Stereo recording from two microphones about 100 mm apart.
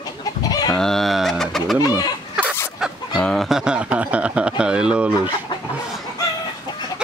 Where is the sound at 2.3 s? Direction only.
10° right (ahead or behind).